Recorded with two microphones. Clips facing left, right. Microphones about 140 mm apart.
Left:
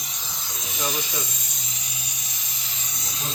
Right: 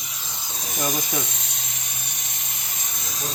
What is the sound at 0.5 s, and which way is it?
Snake, 45° right (ahead or behind).